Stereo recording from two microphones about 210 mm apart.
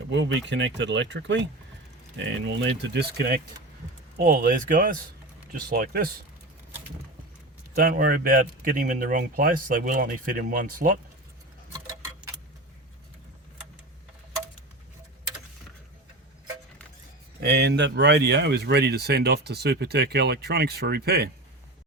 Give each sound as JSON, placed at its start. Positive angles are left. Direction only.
{"t": 0.1, "sound": "speech", "side_deg": -60}
{"t": 4.2, "sound": "speech", "side_deg": -40}
{"t": 7.8, "sound": "speech", "side_deg": -40}
{"t": 17.4, "sound": "speech", "side_deg": -50}